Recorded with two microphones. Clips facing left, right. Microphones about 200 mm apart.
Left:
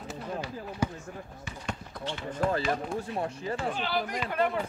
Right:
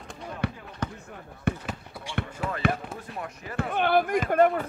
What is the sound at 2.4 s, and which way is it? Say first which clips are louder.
Speech: left 6 dB; 5° right (ahead or behind).